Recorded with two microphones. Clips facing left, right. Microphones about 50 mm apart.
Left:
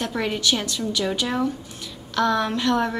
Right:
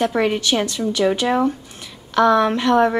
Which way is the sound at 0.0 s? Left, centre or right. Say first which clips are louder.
Right 6 dB; centre.